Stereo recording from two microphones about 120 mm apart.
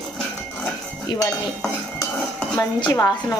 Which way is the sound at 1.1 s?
40° left (ahead or behind).